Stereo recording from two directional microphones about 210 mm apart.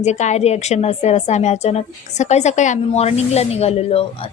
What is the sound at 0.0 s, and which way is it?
A woman's voice, 35° left (ahead or behind).